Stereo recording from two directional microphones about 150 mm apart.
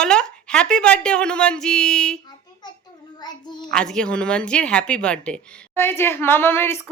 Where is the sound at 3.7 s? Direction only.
5° left (ahead or behind).